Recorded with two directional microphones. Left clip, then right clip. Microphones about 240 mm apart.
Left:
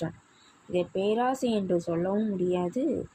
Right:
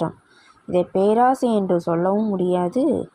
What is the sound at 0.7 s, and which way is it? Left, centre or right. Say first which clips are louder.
Speech: right 9 dB; right.